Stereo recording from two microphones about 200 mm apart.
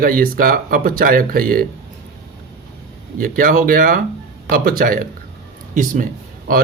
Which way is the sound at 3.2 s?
45° right (ahead or behind).